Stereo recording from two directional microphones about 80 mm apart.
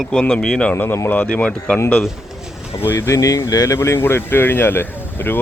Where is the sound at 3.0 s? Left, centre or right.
Left.